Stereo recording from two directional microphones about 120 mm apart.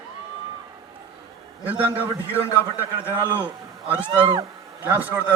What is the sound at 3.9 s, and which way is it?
Speech, 45° right (ahead or behind).